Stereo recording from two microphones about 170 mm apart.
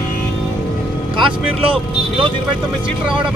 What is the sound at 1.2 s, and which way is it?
Speech, 30° right (ahead or behind).